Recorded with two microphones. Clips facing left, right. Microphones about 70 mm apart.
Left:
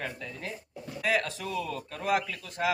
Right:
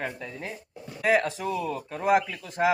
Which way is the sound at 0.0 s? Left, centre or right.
Right.